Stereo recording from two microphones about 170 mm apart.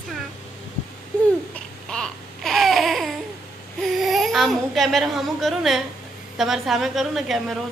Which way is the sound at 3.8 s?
Centre (ahead or behind).